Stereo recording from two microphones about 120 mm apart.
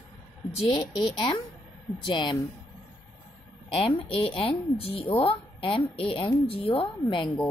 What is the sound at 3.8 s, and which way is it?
A woman's voice, 50° left (ahead or behind).